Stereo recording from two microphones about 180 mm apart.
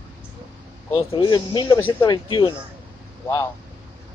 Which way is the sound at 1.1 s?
30° left (ahead or behind).